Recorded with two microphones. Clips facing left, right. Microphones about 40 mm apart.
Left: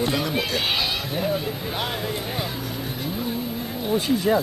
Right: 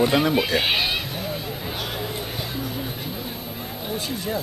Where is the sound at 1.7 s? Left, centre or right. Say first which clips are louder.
Left 2 dB; centre.